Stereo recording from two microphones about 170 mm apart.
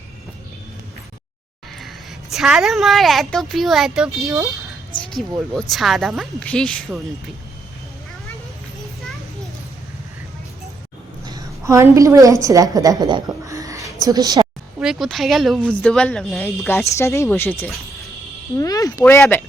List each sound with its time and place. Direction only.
2.3 s a woman's voice: centre (ahead or behind)
11.3 s a woman's voice: 20° right (ahead or behind)
14.8 s a woman's voice: centre (ahead or behind)